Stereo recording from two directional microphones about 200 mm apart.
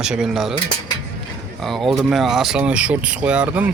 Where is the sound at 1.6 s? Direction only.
Centre (ahead or behind).